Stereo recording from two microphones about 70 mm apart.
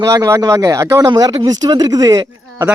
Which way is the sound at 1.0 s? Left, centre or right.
Right.